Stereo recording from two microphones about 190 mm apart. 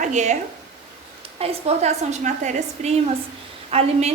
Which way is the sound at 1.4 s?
30° right (ahead or behind).